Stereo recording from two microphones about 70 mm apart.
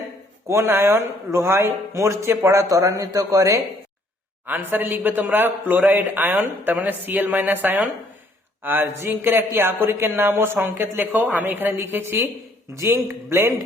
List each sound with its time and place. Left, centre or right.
0.4 s a man's voice: right
4.4 s a man's voice: right
12.7 s a man's voice: right